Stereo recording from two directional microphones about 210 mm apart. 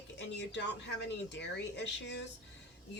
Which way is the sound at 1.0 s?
55° left (ahead or behind).